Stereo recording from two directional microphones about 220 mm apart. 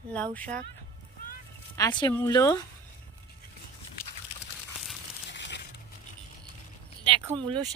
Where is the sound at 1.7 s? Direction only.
15° left (ahead or behind).